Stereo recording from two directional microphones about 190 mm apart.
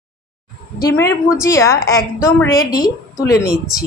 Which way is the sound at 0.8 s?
15° left (ahead or behind).